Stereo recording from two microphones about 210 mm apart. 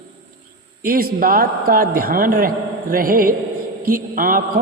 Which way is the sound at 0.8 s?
40° right (ahead or behind).